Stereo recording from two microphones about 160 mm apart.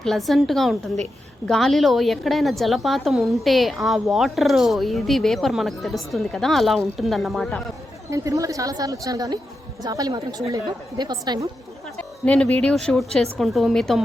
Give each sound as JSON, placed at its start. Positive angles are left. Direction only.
{"t": 0.0, "sound": "a woman's voice", "side_deg": 0}
{"t": 8.1, "sound": "a woman's voice", "side_deg": -20}
{"t": 11.9, "sound": "a woman's voice", "side_deg": 5}